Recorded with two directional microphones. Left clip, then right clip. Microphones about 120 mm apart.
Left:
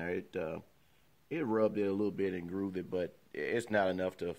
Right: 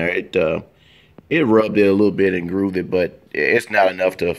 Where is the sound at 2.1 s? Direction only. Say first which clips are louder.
Right 18 dB; 30° left (ahead or behind).